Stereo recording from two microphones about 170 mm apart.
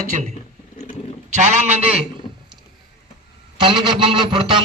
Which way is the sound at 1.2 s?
45° right (ahead or behind).